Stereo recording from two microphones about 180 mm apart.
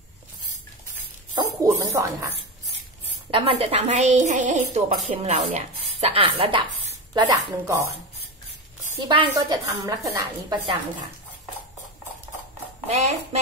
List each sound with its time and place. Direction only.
1.3 s a woman's voice: 20° right (ahead or behind)
3.3 s a woman's voice: 30° right (ahead or behind)
7.6 s speech: 15° right (ahead or behind)
9.0 s a woman's voice: 25° right (ahead or behind)
12.8 s a woman's voice: 40° right (ahead or behind)